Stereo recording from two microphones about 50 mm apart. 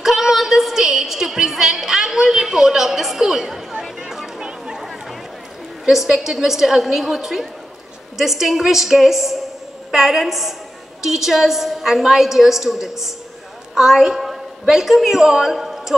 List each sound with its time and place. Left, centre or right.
0.0 s a sound: centre
4.1 s chatter: centre
5.9 s a woman's voice: centre